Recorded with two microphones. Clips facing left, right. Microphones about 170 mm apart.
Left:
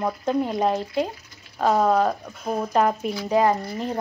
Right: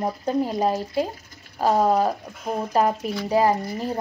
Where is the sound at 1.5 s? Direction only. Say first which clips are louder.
Even; 10° right (ahead or behind).